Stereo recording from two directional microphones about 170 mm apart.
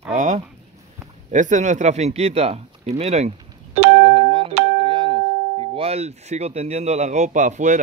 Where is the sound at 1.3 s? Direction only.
45° right (ahead or behind).